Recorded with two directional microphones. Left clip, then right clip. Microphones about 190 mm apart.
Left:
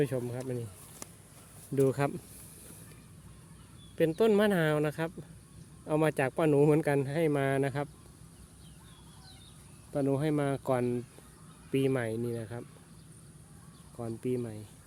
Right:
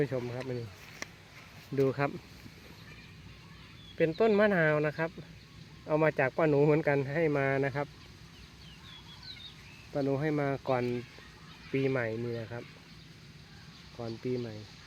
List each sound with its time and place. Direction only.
0.1 s speech: 30° left (ahead or behind)
1.7 s speech: 35° left (ahead or behind)
4.2 s speech: 30° left (ahead or behind)
9.9 s speech: 30° left (ahead or behind)
11.7 s speech: 35° left (ahead or behind)
14.0 s speech: 25° left (ahead or behind)